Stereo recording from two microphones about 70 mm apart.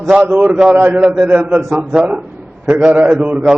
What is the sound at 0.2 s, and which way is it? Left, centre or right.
Speech, right.